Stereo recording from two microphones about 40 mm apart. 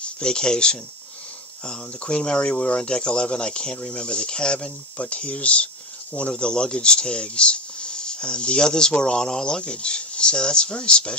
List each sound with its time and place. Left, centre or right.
0.0 s speech: left
6.3 s speech: centre